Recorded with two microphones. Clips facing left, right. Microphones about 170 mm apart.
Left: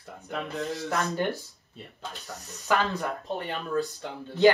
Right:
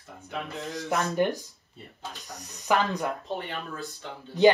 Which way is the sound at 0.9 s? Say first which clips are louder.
Right 4 dB; 20° right (ahead or behind).